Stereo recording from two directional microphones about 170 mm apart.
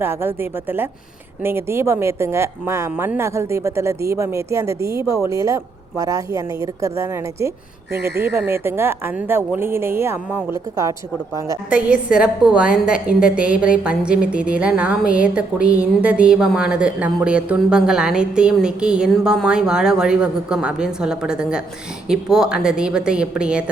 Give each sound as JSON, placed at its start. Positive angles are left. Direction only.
{"t": 0.0, "sound": "a woman's voice", "side_deg": -15}
{"t": 11.7, "sound": "a woman's voice", "side_deg": -5}